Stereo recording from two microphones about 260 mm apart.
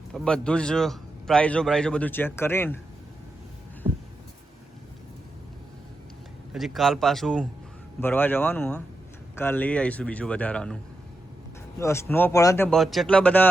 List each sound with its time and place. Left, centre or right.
0.1 s a man's voice: centre
3.9 s a sound: centre
6.5 s a man's voice: centre
11.8 s speech: centre